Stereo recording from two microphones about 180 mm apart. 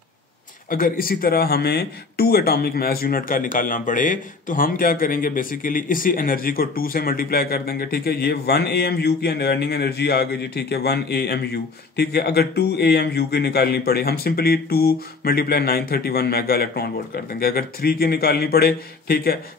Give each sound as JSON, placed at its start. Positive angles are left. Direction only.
{"t": 0.7, "sound": "speech", "side_deg": 50}